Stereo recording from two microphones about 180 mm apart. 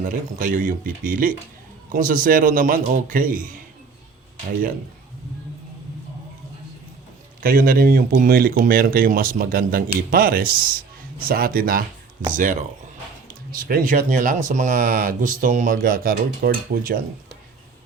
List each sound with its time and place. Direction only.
0.0 s speech: 50° right (ahead or behind)
7.4 s speech: 50° right (ahead or behind)